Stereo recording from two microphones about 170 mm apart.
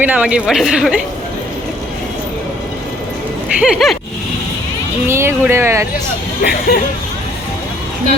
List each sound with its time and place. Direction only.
0.0 s speech: 5° right (ahead or behind)
3.6 s speech: centre (ahead or behind)
5.0 s speech: 15° right (ahead or behind)
6.4 s speech: 65° left (ahead or behind)